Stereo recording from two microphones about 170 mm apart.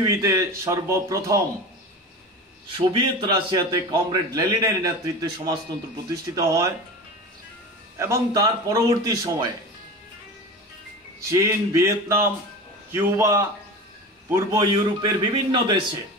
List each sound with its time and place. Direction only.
0.0 s a man's voice: 20° right (ahead or behind)
2.8 s a man's voice: 30° right (ahead or behind)
8.0 s a man's voice: 20° right (ahead or behind)
11.1 s a man's voice: 15° right (ahead or behind)